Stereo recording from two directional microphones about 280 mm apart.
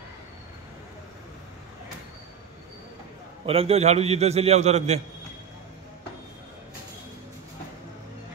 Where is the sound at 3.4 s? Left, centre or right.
Right.